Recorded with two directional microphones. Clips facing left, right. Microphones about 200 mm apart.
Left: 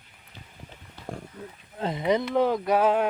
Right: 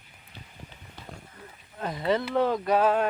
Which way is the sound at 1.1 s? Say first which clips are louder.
Left 9 dB; 50° left (ahead or behind).